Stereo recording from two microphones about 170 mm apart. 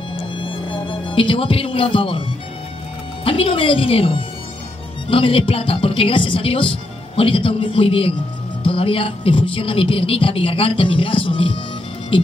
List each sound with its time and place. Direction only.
0.4 s music: 30° left (ahead or behind)
3.3 s speech: 30° left (ahead or behind)